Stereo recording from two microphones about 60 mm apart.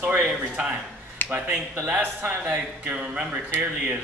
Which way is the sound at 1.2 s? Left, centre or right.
Left.